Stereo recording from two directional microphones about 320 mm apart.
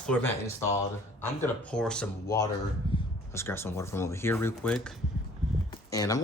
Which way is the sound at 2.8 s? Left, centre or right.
Centre.